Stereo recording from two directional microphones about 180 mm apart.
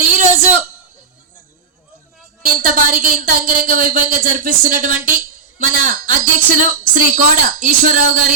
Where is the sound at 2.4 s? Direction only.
50° right (ahead or behind).